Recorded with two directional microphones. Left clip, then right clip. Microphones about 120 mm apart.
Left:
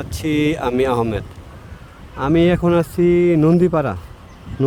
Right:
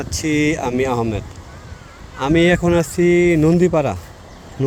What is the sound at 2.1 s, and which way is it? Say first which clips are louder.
Speech: right 1 dB; 20° left (ahead or behind).